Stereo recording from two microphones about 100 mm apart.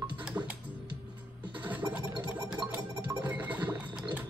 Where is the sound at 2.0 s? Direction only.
40° right (ahead or behind).